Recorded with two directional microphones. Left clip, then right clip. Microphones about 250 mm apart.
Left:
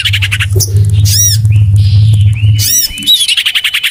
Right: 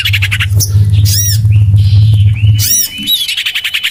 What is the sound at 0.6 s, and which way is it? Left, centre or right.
Squawk, left.